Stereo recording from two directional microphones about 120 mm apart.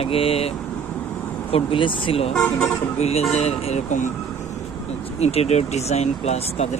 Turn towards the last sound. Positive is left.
turn(degrees=65)  # may be behind; listen again after turning